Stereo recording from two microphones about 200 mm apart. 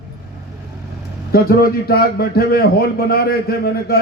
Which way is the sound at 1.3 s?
50° left (ahead or behind).